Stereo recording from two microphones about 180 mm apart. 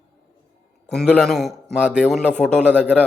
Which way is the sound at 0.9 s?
Centre (ahead or behind).